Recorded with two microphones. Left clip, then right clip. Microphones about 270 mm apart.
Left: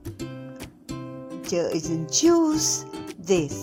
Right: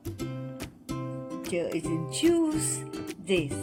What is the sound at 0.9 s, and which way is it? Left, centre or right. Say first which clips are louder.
Music: even; centre.